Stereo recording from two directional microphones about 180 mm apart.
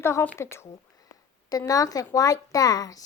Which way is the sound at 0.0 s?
15° left (ahead or behind).